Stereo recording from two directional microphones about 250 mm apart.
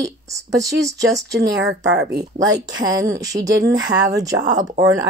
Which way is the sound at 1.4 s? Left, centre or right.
Right.